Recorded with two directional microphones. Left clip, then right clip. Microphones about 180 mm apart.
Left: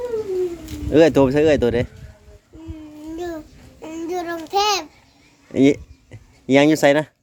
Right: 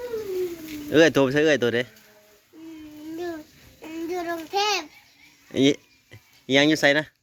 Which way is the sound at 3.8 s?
15° left (ahead or behind).